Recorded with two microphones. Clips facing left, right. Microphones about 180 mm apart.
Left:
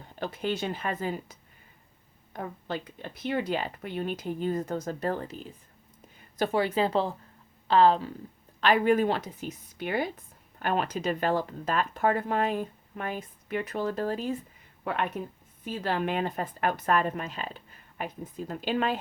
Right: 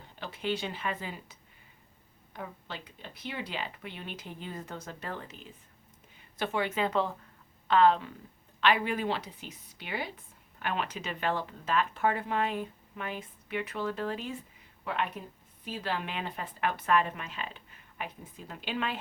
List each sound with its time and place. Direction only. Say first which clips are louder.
0.2 s speech: left 3 dB; 45° left (ahead or behind)
8.6 s speech: left 6 dB; 45° left (ahead or behind)